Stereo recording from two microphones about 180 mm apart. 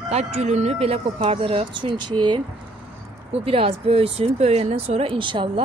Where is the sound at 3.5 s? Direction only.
30° right (ahead or behind).